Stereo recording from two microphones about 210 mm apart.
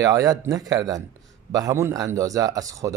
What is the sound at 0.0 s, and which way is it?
A man's voice, 15° right (ahead or behind).